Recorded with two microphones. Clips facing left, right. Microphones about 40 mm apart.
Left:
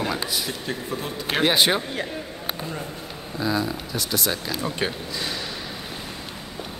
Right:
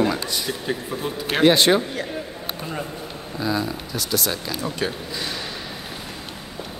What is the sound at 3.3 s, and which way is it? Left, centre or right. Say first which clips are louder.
Speech: even; centre.